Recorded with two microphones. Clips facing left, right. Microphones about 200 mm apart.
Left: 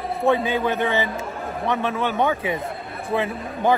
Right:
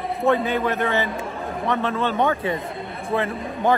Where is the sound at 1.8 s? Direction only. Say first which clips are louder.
Right 1 dB; 15° left (ahead or behind).